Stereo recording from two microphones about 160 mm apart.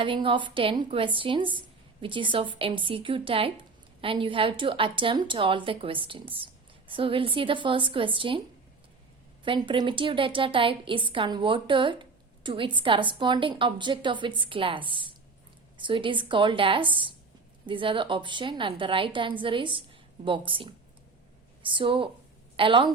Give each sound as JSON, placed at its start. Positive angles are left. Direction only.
{"t": 0.0, "sound": "speech", "side_deg": -30}
{"t": 9.4, "sound": "speech", "side_deg": -30}